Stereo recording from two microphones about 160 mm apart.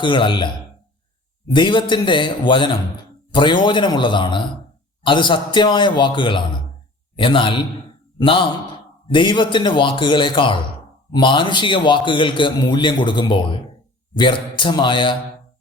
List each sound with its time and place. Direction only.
0.0 s a man's voice: 30° left (ahead or behind)